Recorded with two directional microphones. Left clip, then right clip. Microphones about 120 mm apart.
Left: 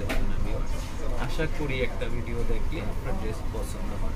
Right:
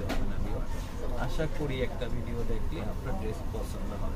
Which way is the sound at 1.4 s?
20° right (ahead or behind).